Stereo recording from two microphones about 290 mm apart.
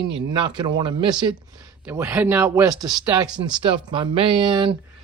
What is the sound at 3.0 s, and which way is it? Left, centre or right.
Speech, centre.